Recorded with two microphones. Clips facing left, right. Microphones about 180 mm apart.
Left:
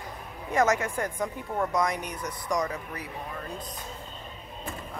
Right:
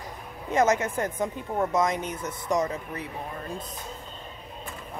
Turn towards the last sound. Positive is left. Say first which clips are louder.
# right 3 dB
turn(degrees=-25)  # may be behind; listen again after turning